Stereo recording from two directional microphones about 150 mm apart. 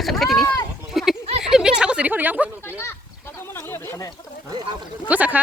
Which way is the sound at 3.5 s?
15° left (ahead or behind).